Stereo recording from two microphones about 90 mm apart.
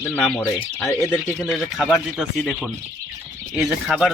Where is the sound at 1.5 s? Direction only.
Centre (ahead or behind).